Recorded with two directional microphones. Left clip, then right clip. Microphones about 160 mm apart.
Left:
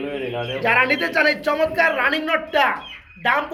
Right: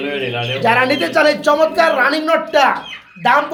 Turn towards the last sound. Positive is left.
turn(degrees=0)  # may be behind; listen again after turning